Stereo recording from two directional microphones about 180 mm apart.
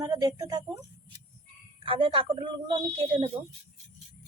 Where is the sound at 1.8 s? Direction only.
30° right (ahead or behind).